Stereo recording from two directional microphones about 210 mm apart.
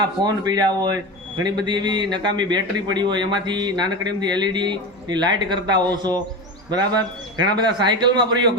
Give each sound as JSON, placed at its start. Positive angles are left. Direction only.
{"t": 0.0, "sound": "a man's voice", "side_deg": -20}
{"t": 7.3, "sound": "a man's voice", "side_deg": -20}